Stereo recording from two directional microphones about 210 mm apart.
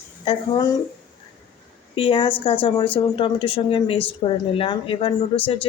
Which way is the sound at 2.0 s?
25° left (ahead or behind).